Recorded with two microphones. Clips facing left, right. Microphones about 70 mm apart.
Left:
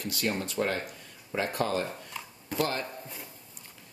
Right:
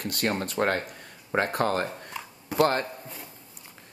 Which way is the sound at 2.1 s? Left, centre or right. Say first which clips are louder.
Right 3 dB; centre.